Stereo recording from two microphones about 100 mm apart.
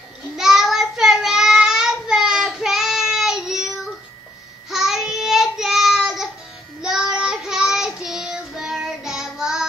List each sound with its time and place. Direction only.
0.4 s child singing: 5° right (ahead or behind)